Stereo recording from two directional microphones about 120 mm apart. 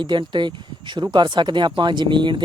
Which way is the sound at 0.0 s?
40° right (ahead or behind).